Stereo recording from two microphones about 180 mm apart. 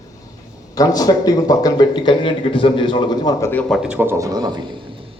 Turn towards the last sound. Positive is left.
turn(degrees=-20)  # may be behind; listen again after turning